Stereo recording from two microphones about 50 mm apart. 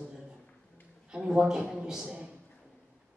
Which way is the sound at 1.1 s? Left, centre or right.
Centre.